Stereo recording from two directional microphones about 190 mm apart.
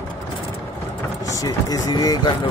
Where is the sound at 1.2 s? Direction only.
15° left (ahead or behind).